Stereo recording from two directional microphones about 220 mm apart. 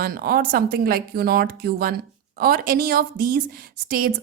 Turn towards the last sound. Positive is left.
turn(degrees=-40)  # may be behind; listen again after turning